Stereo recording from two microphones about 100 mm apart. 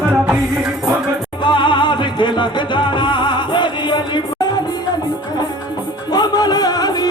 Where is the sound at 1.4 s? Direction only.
50° left (ahead or behind).